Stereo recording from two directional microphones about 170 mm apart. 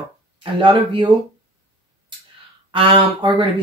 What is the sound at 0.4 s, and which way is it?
Speech, 30° right (ahead or behind).